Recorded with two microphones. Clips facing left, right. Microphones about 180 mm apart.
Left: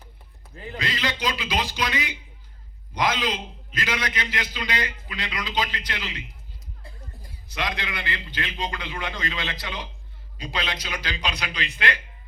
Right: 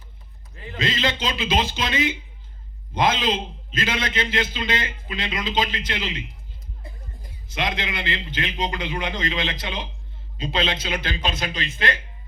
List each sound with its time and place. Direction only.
0.8 s a man's voice: 25° right (ahead or behind)
11.0 s speech: 50° right (ahead or behind)